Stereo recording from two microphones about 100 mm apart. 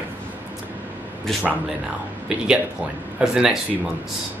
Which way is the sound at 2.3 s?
5° right (ahead or behind).